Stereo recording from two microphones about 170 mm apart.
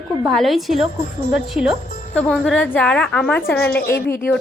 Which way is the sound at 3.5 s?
70° left (ahead or behind).